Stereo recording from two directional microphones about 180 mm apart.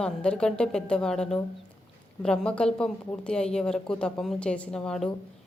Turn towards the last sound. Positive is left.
turn(degrees=5)  # may be behind; listen again after turning